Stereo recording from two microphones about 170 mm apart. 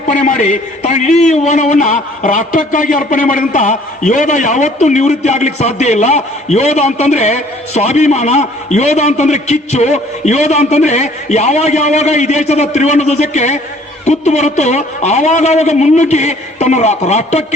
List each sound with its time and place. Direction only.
0.1 s a man's voice: 50° left (ahead or behind)